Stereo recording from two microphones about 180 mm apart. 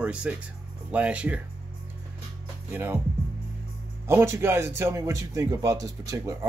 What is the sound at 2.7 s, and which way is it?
Speech, 10° right (ahead or behind).